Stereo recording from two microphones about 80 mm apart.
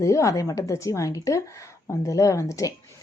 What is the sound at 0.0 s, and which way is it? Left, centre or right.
Speech, left.